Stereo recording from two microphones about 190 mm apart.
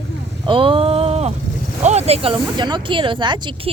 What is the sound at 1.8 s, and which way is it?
Speech, 35° right (ahead or behind).